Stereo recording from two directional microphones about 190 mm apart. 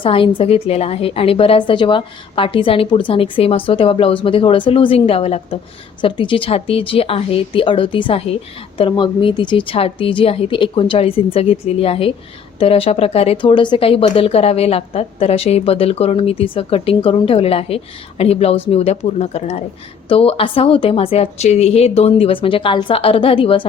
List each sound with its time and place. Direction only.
0.0 s a woman's voice: 25° left (ahead or behind)